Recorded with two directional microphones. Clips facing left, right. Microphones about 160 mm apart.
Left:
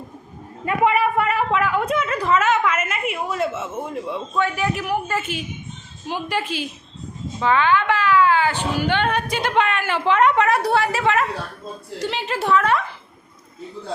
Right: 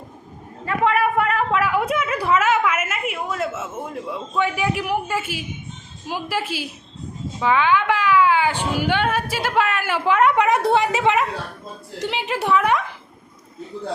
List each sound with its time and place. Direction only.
0.6 s a woman's voice: 15° left (ahead or behind)
0.9 s a sound: centre (ahead or behind)
4.4 s a man's voice: 15° right (ahead or behind)